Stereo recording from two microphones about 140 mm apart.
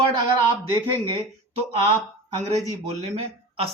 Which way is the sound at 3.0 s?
45° right (ahead or behind).